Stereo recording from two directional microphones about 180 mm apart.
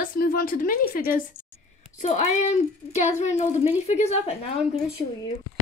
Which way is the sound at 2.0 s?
40° left (ahead or behind).